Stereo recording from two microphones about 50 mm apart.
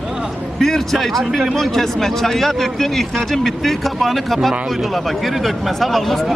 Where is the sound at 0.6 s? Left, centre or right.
Centre.